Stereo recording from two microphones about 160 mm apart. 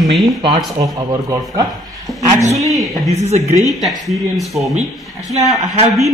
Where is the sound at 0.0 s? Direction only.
Centre (ahead or behind).